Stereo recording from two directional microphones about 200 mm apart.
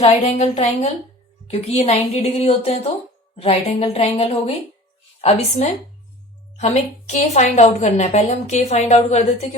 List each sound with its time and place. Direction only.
0.0 s a woman's voice: 30° left (ahead or behind)
7.1 s a woman's voice: 35° left (ahead or behind)